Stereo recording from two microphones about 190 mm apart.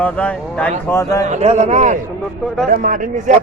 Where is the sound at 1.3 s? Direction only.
35° right (ahead or behind).